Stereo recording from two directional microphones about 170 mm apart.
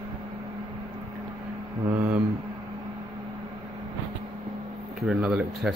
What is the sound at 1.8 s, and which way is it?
Speech, 20° right (ahead or behind).